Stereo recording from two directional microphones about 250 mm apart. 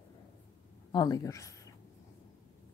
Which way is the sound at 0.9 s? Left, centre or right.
Centre.